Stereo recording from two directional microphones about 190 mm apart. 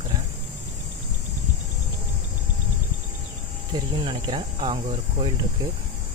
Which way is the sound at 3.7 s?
20° right (ahead or behind).